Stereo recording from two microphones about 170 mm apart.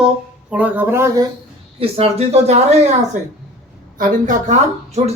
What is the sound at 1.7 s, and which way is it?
Speech, 35° right (ahead or behind).